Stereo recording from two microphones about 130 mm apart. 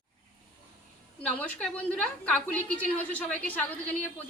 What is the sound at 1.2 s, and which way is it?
A woman's voice, 10° left (ahead or behind).